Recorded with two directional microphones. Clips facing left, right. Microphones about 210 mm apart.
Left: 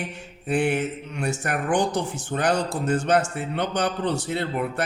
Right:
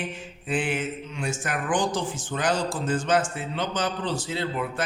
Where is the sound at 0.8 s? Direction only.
65° left (ahead or behind).